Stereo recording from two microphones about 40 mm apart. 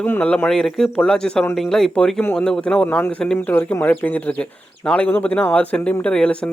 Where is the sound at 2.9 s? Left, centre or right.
Left.